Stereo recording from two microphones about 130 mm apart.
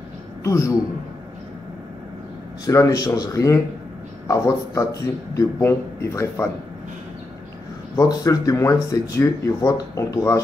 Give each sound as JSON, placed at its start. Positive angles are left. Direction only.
{"t": 0.4, "sound": "a man's voice", "side_deg": 25}
{"t": 2.6, "sound": "speech", "side_deg": 25}
{"t": 7.9, "sound": "speech", "side_deg": 25}